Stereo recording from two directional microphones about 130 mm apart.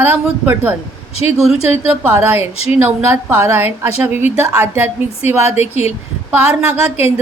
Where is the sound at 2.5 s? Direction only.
50° left (ahead or behind).